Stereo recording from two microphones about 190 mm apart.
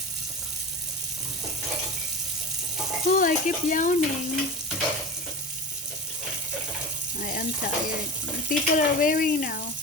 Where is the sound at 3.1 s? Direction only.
45° left (ahead or behind).